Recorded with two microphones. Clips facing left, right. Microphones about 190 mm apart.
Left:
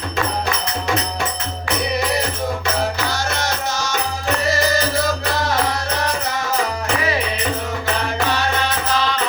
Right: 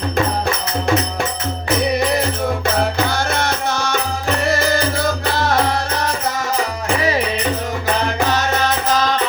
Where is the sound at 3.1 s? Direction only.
55° right (ahead or behind).